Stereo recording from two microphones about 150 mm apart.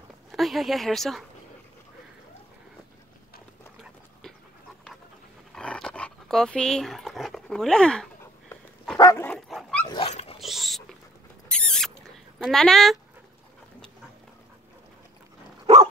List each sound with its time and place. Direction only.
0.3 s speech: centre (ahead or behind)
5.5 s dog: 5° left (ahead or behind)
8.9 s dog: 20° left (ahead or behind)
9.5 s dog: centre (ahead or behind)
9.8 s dog: 40° left (ahead or behind)
10.4 s dog: centre (ahead or behind)
11.4 s rodents: 5° left (ahead or behind)
12.4 s speech: centre (ahead or behind)
15.6 s dog: 45° right (ahead or behind)